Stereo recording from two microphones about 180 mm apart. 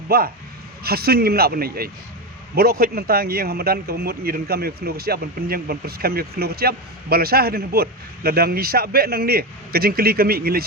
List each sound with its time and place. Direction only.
0.1 s a man's voice: 55° right (ahead or behind)